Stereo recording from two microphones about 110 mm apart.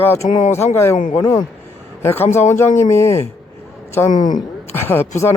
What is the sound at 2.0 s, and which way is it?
Speech, 20° left (ahead or behind).